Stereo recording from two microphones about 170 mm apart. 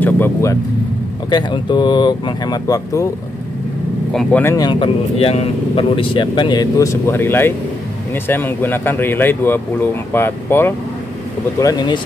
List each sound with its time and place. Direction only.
0.0 s speech: 15° left (ahead or behind)
1.3 s speech: 25° left (ahead or behind)
4.1 s speech: 5° left (ahead or behind)
4.6 s speech: 25° left (ahead or behind)
11.6 s speech: 25° left (ahead or behind)